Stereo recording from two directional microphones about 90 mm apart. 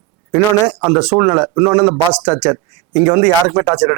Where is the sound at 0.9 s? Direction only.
10° right (ahead or behind).